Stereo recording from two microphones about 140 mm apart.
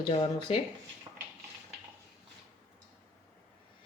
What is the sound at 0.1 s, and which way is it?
Speech, 40° left (ahead or behind).